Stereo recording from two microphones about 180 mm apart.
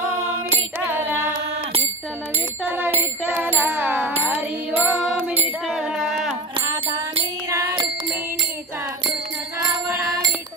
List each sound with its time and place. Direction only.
0.7 s music: 10° right (ahead or behind)
3.0 s music: 10° right (ahead or behind)
5.7 s a sound: 5° right (ahead or behind)
6.7 s music: 30° right (ahead or behind)
7.4 s music: 15° right (ahead or behind)